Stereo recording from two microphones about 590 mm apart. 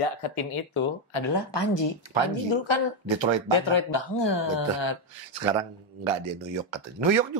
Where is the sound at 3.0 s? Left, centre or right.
Right.